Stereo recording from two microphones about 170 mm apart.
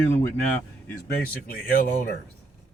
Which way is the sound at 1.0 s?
60° left (ahead or behind).